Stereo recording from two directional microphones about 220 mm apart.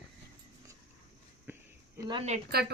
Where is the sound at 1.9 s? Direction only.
20° right (ahead or behind).